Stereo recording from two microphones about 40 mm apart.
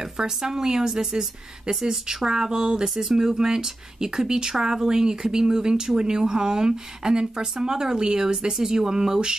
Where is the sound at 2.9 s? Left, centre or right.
Centre.